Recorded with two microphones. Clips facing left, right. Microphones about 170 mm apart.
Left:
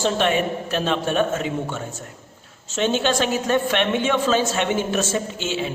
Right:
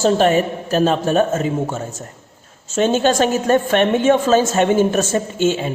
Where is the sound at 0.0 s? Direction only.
40° right (ahead or behind).